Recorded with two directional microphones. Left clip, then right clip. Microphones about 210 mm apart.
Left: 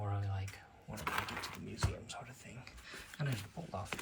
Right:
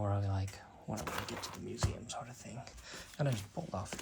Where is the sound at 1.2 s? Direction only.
Centre (ahead or behind).